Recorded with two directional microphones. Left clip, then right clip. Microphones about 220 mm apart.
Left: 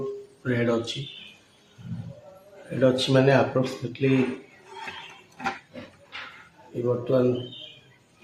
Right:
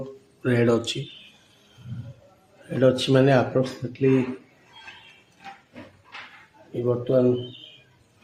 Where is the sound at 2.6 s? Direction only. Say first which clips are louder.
Right 2 dB; 45° right (ahead or behind).